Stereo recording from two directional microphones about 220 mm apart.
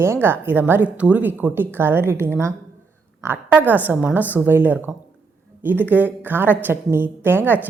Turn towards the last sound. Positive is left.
turn(degrees=-10)  # may be behind; listen again after turning